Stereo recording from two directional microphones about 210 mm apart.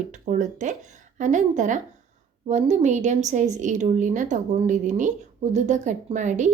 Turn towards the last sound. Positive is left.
turn(degrees=-35)  # may be behind; listen again after turning